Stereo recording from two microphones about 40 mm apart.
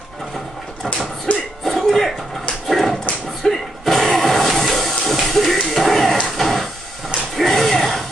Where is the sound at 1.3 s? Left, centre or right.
Left.